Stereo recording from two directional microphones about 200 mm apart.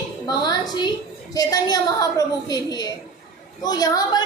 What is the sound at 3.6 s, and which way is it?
Speech, 20° left (ahead or behind).